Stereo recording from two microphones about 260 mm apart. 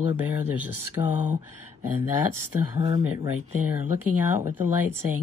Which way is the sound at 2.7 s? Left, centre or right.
Centre.